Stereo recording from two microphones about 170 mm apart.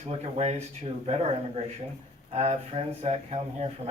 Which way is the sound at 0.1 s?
40° right (ahead or behind).